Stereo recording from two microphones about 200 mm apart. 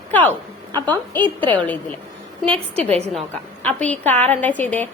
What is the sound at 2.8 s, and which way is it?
Speech, 30° right (ahead or behind).